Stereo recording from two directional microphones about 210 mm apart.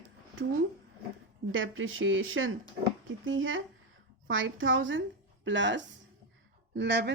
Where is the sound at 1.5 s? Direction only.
70° right (ahead or behind).